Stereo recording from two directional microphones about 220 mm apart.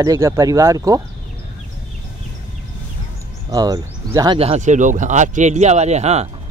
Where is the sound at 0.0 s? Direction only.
15° right (ahead or behind).